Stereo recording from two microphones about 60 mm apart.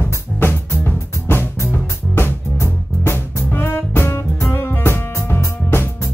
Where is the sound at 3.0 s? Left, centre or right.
Left.